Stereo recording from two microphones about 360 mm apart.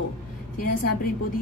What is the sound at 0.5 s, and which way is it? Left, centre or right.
Speech, left.